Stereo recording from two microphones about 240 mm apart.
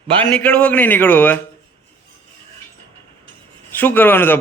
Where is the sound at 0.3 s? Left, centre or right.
Centre.